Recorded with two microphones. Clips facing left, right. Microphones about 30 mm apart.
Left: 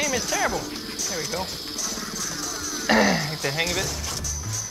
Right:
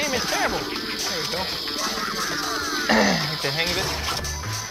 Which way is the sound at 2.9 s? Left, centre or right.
Centre.